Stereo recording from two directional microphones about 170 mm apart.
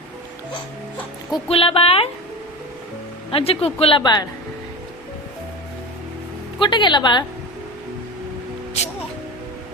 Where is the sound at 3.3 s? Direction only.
35° left (ahead or behind).